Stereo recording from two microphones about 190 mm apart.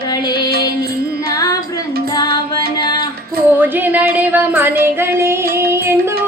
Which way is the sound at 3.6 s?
10° right (ahead or behind).